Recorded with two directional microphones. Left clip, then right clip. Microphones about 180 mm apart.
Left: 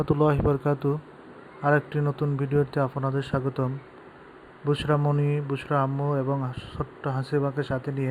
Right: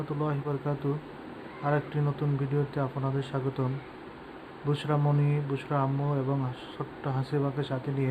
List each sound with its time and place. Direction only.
0.2 s speech: 50° left (ahead or behind)
4.7 s speech: 35° left (ahead or behind)